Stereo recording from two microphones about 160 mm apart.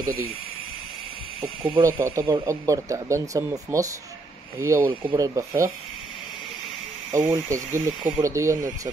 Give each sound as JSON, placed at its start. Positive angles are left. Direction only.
{"t": 1.7, "sound": "speech", "side_deg": -15}
{"t": 7.1, "sound": "speech", "side_deg": -20}